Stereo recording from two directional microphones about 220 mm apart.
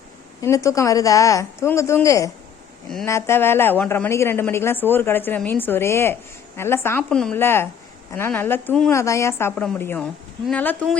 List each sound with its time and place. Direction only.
0.4 s a woman's voice: 15° left (ahead or behind)